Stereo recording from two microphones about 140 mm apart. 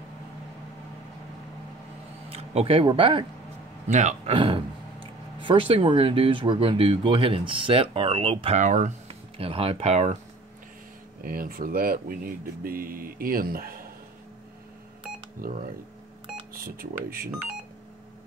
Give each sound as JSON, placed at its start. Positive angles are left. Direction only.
{"t": 2.2, "sound": "speech", "side_deg": -45}
{"t": 3.9, "sound": "speech", "side_deg": -55}
{"t": 4.4, "sound": "speech", "side_deg": -40}
{"t": 8.5, "sound": "speech", "side_deg": -60}
{"t": 9.0, "sound": "speech", "side_deg": -45}
{"t": 11.2, "sound": "speech", "side_deg": -90}
{"t": 15.4, "sound": "speech", "side_deg": -90}